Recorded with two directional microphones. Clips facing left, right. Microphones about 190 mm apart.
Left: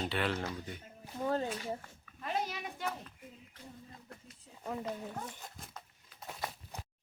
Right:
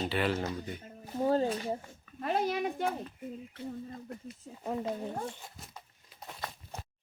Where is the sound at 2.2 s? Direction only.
45° right (ahead or behind).